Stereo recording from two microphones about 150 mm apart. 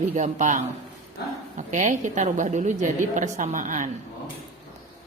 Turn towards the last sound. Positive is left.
turn(degrees=-60)  # may be behind; listen again after turning